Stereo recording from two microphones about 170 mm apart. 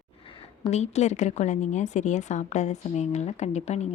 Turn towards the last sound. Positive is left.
turn(degrees=40)  # may be behind; listen again after turning